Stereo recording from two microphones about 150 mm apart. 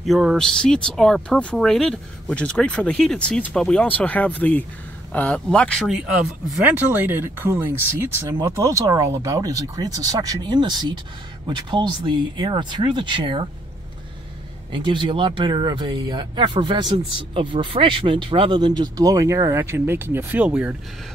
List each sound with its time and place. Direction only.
0.0 s speech: centre (ahead or behind)
6.6 s speech: 10° right (ahead or behind); by 13.5 s 30° right (ahead or behind)
14.7 s speech: 35° right (ahead or behind); by 20.7 s 10° right (ahead or behind)